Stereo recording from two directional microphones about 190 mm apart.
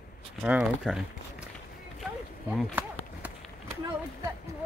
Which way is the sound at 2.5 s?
5° right (ahead or behind).